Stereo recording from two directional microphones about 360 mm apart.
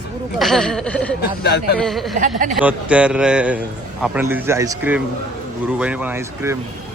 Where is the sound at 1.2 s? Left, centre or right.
Left.